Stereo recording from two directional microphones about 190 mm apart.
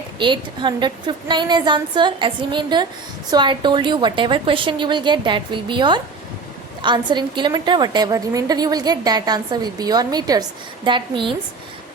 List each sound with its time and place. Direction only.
0.2 s a woman's voice: 25° right (ahead or behind)